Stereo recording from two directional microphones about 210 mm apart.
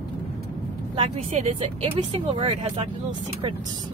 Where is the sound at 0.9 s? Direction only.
30° right (ahead or behind).